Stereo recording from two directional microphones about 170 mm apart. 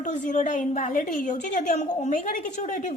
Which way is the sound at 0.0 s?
45° left (ahead or behind).